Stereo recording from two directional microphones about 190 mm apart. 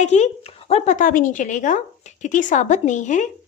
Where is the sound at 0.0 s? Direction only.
35° left (ahead or behind).